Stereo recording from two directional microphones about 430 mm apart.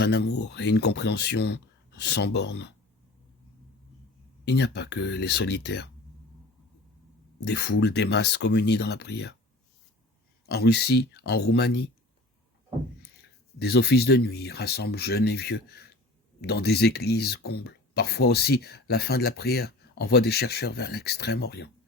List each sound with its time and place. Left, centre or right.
0.0 s speech: left
4.4 s speech: left
7.4 s speech: left
10.4 s speech: left
13.6 s speech: left